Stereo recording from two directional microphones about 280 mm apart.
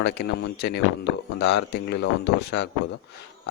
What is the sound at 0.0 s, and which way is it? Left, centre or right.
Speech, left.